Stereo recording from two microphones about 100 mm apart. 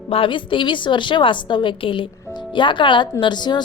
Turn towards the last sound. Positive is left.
turn(degrees=45)  # may be behind; listen again after turning